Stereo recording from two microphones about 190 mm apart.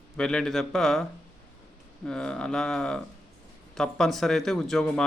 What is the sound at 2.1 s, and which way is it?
Speech, 5° left (ahead or behind).